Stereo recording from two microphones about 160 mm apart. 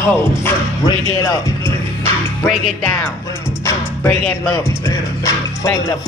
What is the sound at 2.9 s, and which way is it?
Music, 20° left (ahead or behind).